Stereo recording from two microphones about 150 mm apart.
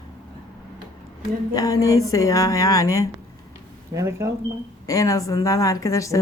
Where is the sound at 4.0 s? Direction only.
20° right (ahead or behind).